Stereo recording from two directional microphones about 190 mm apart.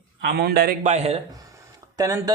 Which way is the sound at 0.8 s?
35° right (ahead or behind).